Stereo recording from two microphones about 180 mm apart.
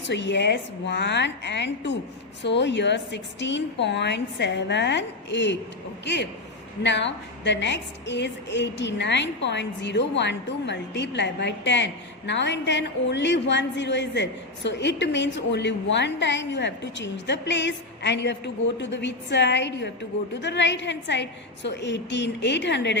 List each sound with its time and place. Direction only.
0.1 s a woman's voice: 75° left (ahead or behind)